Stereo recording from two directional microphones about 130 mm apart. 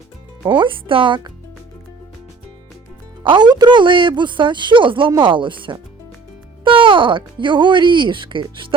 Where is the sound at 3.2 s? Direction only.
35° right (ahead or behind).